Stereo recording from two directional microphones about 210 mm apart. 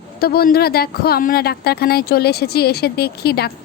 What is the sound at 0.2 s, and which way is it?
Speech, 45° left (ahead or behind).